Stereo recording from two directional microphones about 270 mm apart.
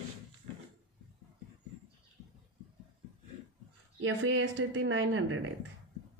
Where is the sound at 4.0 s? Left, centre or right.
Right.